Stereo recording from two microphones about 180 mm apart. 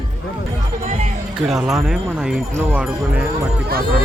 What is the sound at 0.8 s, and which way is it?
Speech, 45° right (ahead or behind).